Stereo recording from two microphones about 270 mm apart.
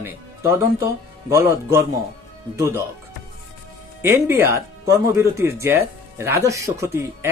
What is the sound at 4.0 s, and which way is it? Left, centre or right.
Speech, centre.